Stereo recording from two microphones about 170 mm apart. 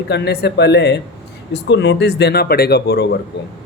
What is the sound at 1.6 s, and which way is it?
Speech, 90° left.